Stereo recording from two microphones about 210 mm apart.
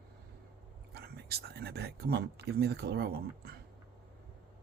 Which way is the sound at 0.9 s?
50° right (ahead or behind).